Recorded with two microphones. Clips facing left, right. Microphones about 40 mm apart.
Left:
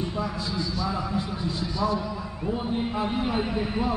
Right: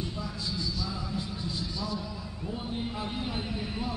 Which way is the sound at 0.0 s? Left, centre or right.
Left.